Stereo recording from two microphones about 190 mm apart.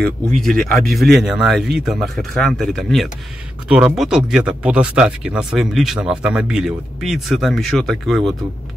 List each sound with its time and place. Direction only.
0.5 s speech: 50° right (ahead or behind)
0.8 s speech: centre (ahead or behind)